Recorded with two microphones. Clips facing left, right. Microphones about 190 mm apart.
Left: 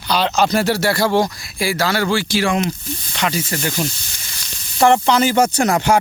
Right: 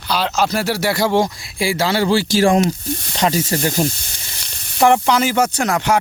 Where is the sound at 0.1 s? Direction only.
5° right (ahead or behind); by 4.4 s 30° right (ahead or behind).